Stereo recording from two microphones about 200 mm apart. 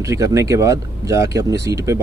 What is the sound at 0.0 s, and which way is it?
Speech, 15° right (ahead or behind).